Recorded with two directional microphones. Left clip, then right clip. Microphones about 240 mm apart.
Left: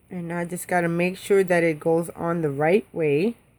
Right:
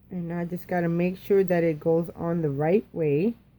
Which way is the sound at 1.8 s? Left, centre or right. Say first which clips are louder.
Left 2 dB; left.